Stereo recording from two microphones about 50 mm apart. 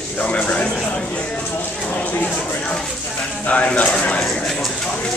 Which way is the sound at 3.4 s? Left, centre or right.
Left.